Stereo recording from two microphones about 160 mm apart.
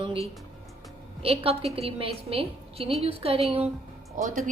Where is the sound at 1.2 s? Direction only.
35° right (ahead or behind).